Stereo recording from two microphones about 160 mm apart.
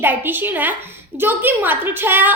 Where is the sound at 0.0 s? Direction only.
10° right (ahead or behind).